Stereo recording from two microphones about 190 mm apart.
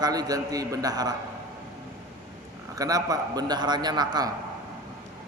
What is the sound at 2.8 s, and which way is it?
A man's voice, 20° right (ahead or behind).